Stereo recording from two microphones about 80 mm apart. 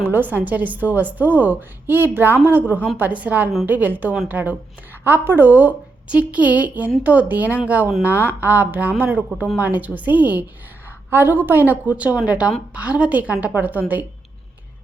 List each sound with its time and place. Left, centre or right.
0.0 s a woman's voice: right